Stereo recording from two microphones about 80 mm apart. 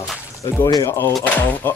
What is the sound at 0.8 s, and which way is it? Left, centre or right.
Speech, left.